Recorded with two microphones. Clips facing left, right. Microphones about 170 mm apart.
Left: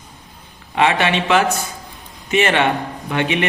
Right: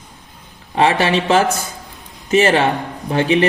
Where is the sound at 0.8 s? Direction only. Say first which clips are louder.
Right 2 dB; 35° right (ahead or behind).